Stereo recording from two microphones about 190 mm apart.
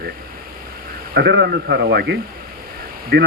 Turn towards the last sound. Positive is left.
turn(degrees=-60)  # may be behind; listen again after turning